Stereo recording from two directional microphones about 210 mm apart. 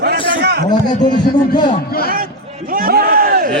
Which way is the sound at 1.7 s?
45° left (ahead or behind).